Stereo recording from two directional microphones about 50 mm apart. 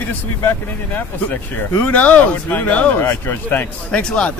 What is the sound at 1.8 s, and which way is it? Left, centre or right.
Speech, left.